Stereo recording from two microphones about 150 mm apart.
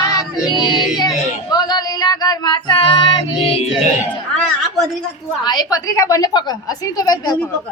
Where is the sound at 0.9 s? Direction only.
25° left (ahead or behind).